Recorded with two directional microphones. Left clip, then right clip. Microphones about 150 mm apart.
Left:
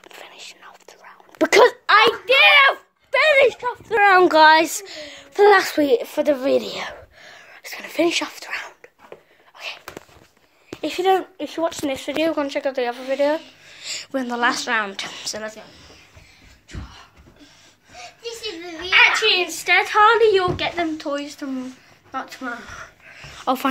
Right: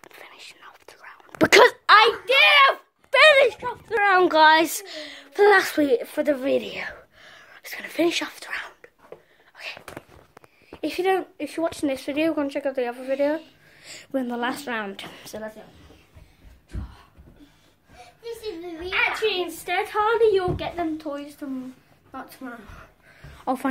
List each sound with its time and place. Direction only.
0.0 s whispering: centre (ahead or behind); by 2.0 s 20° right (ahead or behind)
2.0 s a child's voice: centre (ahead or behind)
3.9 s speech: 20° left (ahead or behind)
4.2 s a woman's voice: 5° left (ahead or behind)
9.6 s whispering: 5° left (ahead or behind)
10.8 s speech: 15° right (ahead or behind)
11.1 s a woman's voice: centre (ahead or behind)
11.8 s speech: 25° right (ahead or behind)
18.2 s a sound: 5° left (ahead or behind)
18.9 s a sound: 10° right (ahead or behind)
19.6 s a woman's voice: 10° right (ahead or behind)
20.0 s a woman's voice: 10° left (ahead or behind)
23.0 s a sound: 15° right (ahead or behind)